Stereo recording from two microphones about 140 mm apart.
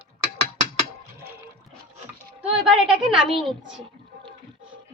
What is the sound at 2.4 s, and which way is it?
Speech, 5° right (ahead or behind).